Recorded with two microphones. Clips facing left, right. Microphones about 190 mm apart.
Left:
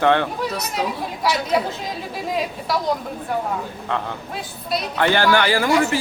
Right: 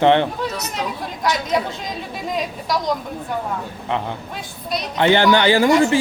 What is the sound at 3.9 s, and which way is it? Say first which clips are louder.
A man's voice: right 2 dB; 20° right (ahead or behind).